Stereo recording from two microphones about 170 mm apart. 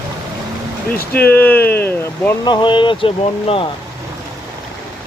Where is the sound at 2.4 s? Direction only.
25° left (ahead or behind).